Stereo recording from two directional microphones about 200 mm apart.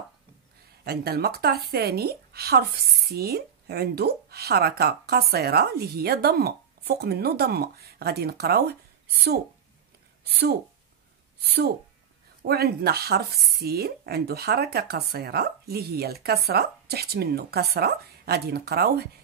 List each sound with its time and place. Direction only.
0.8 s speech: 50° right (ahead or behind)
10.2 s speech: 50° right (ahead or behind)
12.4 s speech: 50° right (ahead or behind)